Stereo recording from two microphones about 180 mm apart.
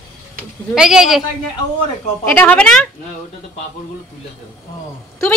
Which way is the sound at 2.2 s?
10° left (ahead or behind).